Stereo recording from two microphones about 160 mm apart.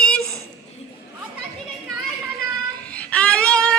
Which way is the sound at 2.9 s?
5° left (ahead or behind).